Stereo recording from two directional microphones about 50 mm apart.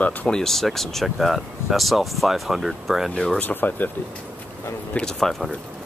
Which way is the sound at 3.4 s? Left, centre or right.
Left.